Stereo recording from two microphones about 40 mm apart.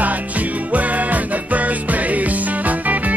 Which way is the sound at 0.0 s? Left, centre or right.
Right.